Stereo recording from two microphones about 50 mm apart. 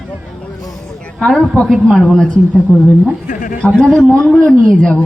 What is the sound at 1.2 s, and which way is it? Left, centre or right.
Music, centre.